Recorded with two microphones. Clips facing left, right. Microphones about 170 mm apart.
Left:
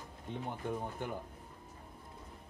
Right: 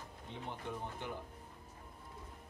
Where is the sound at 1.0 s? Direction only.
45° left (ahead or behind).